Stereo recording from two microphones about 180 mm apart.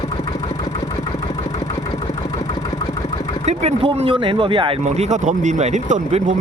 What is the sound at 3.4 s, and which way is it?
Speech, 35° right (ahead or behind).